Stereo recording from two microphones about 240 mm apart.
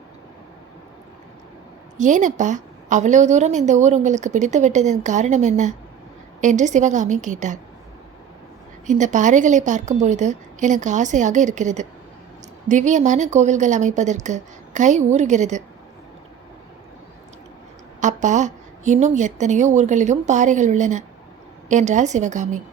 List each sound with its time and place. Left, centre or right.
2.0 s a woman's voice: right
8.9 s a woman's voice: right
18.0 s a woman's voice: right